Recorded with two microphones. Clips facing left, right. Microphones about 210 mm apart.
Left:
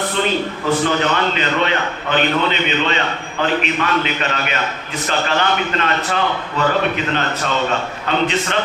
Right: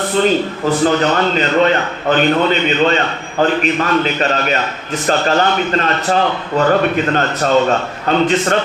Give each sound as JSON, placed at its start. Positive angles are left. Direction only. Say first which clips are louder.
{"t": 1.1, "sound": "a man's voice", "louder": "right 5 dB", "side_deg": -40}